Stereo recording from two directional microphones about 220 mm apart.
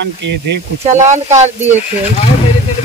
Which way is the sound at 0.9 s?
30° right (ahead or behind).